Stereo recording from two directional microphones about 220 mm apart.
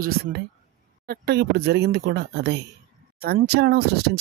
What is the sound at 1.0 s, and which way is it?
Speech, 45° right (ahead or behind).